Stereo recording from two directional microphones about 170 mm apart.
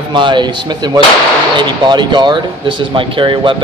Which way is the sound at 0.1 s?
25° right (ahead or behind).